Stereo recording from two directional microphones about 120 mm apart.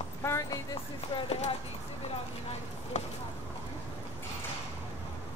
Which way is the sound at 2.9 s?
70° left (ahead or behind).